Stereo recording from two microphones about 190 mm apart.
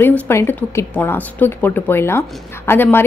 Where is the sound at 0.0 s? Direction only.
10° left (ahead or behind).